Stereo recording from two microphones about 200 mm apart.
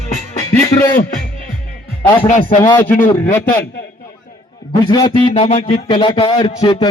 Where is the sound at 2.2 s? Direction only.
40° left (ahead or behind).